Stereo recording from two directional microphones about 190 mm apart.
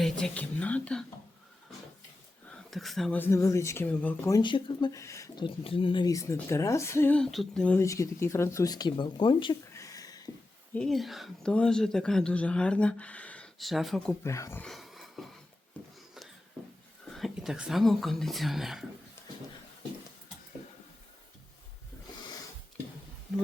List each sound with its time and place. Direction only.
0.0 s speech: 5° left (ahead or behind)
2.5 s speech: centre (ahead or behind); by 5.5 s 15° left (ahead or behind)
5.6 s speech: 30° left (ahead or behind)
10.8 s speech: centre (ahead or behind)
14.3 s speech: 15° left (ahead or behind)
14.6 s a sound: centre (ahead or behind)
17.1 s speech: centre (ahead or behind)